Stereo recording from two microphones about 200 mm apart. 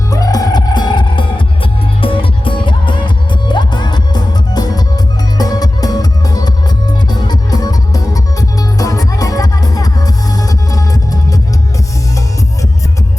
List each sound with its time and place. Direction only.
0.1 s music: 20° left (ahead or behind)